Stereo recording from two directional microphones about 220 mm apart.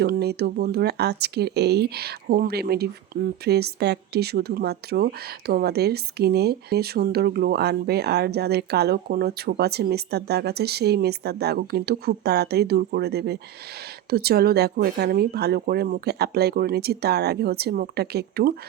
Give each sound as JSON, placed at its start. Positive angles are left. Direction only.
{"t": 0.0, "sound": "speech", "side_deg": -45}